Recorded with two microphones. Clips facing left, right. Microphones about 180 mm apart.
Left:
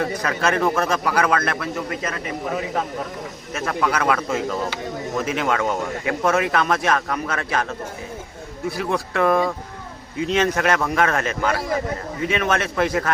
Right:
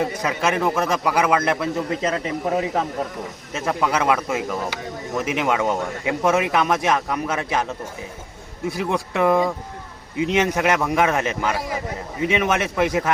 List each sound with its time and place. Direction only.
0.0 s a man's voice: 20° right (ahead or behind)
3.5 s speech: 20° right (ahead or behind)
8.7 s speech: 20° right (ahead or behind)